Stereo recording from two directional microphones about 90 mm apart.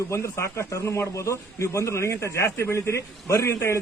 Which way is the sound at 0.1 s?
30° left (ahead or behind).